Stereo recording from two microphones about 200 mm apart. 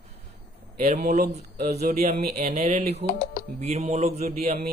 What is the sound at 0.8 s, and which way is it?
Speech, 50° right (ahead or behind).